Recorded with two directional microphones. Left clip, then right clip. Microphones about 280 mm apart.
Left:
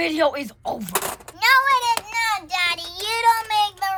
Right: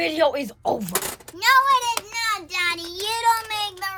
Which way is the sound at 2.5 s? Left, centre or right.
Centre.